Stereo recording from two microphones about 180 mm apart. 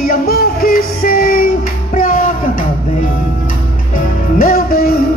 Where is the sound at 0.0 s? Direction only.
55° left (ahead or behind).